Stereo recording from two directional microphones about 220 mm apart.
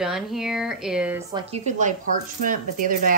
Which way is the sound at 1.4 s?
30° right (ahead or behind).